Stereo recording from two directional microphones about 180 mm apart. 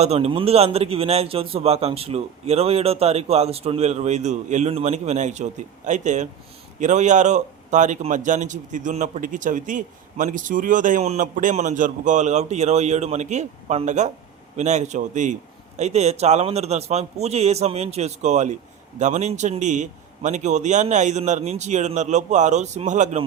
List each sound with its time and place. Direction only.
0.0 s a man's voice: 35° right (ahead or behind)